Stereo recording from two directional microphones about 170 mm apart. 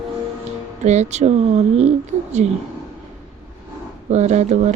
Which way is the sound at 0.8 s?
40° right (ahead or behind).